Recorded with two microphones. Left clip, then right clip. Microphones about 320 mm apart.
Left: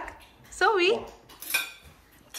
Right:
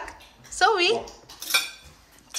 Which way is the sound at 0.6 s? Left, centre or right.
Centre.